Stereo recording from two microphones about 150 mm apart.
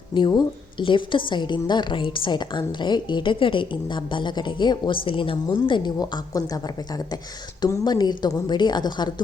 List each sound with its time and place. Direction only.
0.1 s a woman's voice: 30° left (ahead or behind)